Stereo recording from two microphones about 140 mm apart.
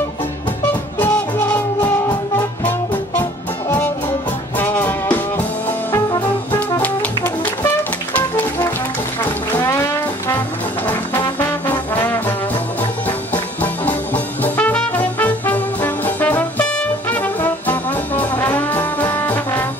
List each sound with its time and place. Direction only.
4.6 s music: 15° left (ahead or behind)
7.2 s music: 15° left (ahead or behind)
9.6 s music: 20° left (ahead or behind)
11.1 s trombone: 15° left (ahead or behind)
13.3 s music: 10° left (ahead or behind)
17.1 s brass instrument: 15° left (ahead or behind)